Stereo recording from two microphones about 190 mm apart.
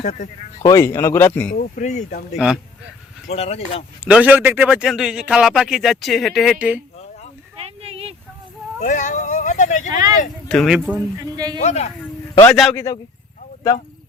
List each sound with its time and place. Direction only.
0.0 s speech: 45° left (ahead or behind)
0.6 s speech: 20° left (ahead or behind)
1.5 s speech: 40° left (ahead or behind)
3.2 s speech: 35° left (ahead or behind)
4.0 s a man's voice: 5° right (ahead or behind)
7.6 s a sound: 30° right (ahead or behind)
8.8 s a sound: 40° left (ahead or behind)
9.9 s a man's voice: 20° right (ahead or behind)
10.5 s a man's voice: centre (ahead or behind)
11.2 s a man's voice: 20° right (ahead or behind)
11.6 s speech: 35° left (ahead or behind)
12.5 s a man's voice: centre (ahead or behind)
12.7 s speech: 15° left (ahead or behind)